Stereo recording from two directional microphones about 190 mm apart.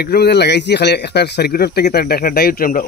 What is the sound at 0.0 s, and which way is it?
Speech, 55° left (ahead or behind).